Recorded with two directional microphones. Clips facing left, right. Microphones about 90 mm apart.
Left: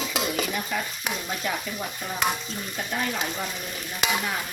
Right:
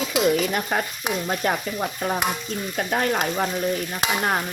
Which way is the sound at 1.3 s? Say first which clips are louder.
Right 7 dB; 50° right (ahead or behind).